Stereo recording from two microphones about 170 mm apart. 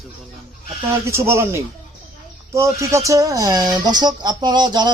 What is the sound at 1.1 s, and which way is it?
Speech, 15° right (ahead or behind).